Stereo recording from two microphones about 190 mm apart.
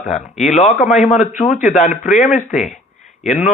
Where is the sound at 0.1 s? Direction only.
40° left (ahead or behind).